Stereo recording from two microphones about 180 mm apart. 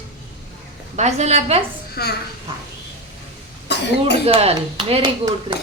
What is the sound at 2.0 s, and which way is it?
Speech, 60° left (ahead or behind).